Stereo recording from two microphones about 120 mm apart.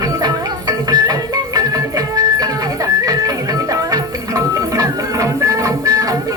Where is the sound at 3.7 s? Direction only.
30° right (ahead or behind).